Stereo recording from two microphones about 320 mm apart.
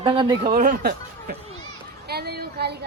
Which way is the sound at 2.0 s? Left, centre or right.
Right.